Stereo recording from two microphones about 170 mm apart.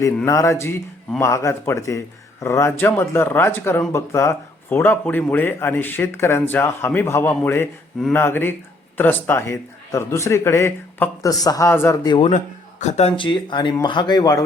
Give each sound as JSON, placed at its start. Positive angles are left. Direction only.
{"t": 0.3, "sound": "speech", "side_deg": 15}
{"t": 12.8, "sound": "speech", "side_deg": 40}